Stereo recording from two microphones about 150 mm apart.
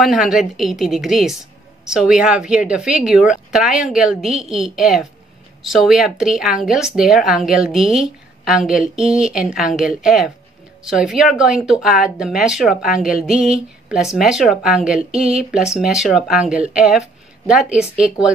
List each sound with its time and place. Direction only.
0.0 s speech: centre (ahead or behind)